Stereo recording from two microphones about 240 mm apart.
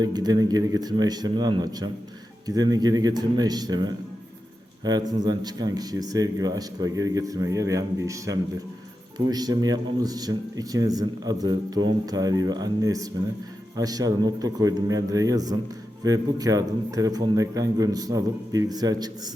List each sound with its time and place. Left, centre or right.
0.0 s speech: centre